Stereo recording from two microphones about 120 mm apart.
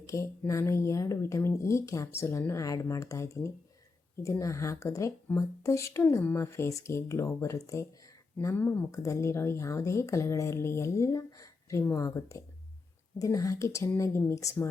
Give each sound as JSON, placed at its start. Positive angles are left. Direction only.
{"t": 0.0, "sound": "speech", "side_deg": 25}